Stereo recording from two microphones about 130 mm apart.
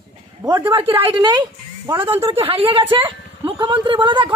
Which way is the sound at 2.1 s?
45° right (ahead or behind).